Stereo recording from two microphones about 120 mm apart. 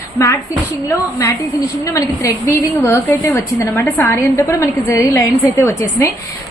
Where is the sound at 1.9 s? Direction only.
25° left (ahead or behind).